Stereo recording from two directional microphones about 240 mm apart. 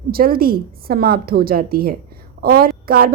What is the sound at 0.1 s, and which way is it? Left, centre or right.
A woman's voice, right.